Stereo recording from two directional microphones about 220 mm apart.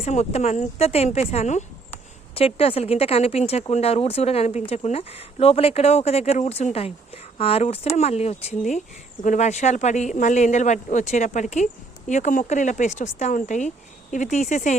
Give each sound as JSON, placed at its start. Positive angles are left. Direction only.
{"t": 0.0, "sound": "speech", "side_deg": 30}